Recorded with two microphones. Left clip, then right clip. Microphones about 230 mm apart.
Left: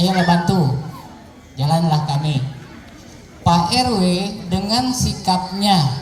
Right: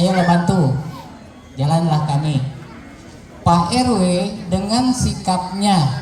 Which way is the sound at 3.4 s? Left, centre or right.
Left.